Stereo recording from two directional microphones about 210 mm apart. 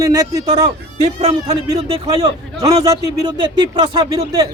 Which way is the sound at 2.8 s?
20° right (ahead or behind).